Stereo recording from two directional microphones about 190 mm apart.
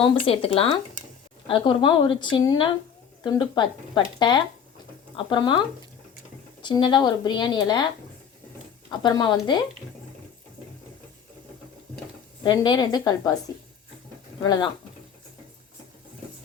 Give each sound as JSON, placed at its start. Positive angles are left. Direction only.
{"t": 0.0, "sound": "speech", "side_deg": 30}
{"t": 8.9, "sound": "speech", "side_deg": 25}
{"t": 12.4, "sound": "speech", "side_deg": 20}
{"t": 14.4, "sound": "speech", "side_deg": 20}